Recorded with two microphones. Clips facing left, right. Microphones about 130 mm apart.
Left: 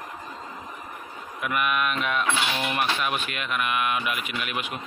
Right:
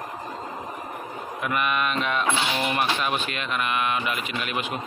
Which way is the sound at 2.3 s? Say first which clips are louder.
Right 1 dB; 15° right (ahead or behind).